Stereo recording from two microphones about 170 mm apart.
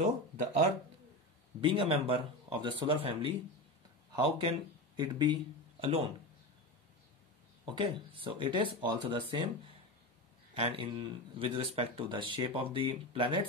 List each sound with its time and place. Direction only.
1.6 s speech: 30° right (ahead or behind)
7.7 s speech: 30° right (ahead or behind)
10.5 s speech: 35° right (ahead or behind)